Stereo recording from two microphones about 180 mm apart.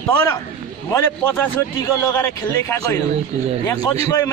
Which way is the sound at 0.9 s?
10° left (ahead or behind).